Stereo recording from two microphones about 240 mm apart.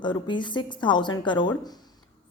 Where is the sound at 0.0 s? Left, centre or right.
Centre.